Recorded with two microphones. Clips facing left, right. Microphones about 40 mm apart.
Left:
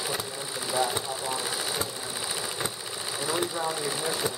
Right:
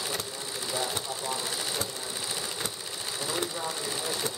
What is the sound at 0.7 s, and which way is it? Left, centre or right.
Speech, centre.